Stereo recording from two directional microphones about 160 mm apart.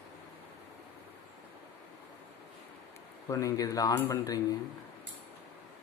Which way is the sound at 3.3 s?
20° left (ahead or behind).